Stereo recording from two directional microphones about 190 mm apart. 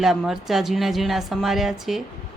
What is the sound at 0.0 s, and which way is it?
A woman's voice, centre (ahead or behind).